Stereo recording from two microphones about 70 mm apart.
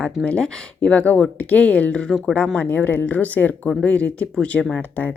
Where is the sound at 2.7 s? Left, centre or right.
Left.